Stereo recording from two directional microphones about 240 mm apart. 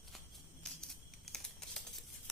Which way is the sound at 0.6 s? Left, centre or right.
Centre.